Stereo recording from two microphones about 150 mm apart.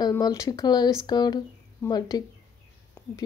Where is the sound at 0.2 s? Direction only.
25° left (ahead or behind).